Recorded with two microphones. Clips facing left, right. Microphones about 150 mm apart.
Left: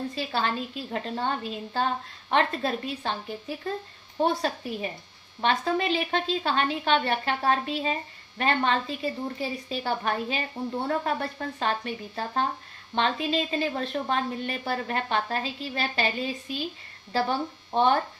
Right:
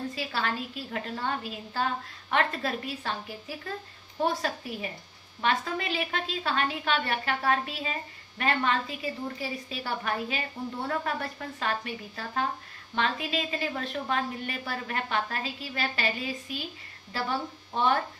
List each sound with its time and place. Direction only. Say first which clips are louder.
0.2 s a woman's voice: left 5 dB; 30° left (ahead or behind)